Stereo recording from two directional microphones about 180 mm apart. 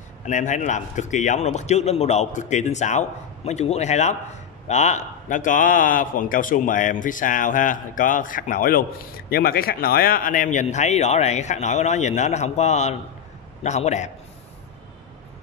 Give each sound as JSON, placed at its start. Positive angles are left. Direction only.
{"t": 0.3, "sound": "a man's voice", "side_deg": 40}